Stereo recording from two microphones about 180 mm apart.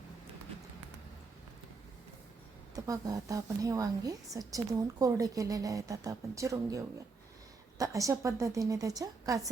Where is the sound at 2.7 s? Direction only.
20° right (ahead or behind).